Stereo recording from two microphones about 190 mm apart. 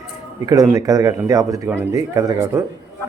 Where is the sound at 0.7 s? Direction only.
20° right (ahead or behind).